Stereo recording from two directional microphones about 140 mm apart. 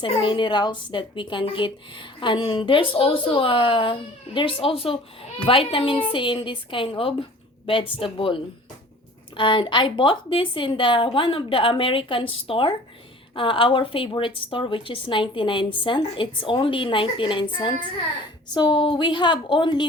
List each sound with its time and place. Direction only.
0.0 s speech: 35° left (ahead or behind)
9.4 s speech: 35° left (ahead or behind)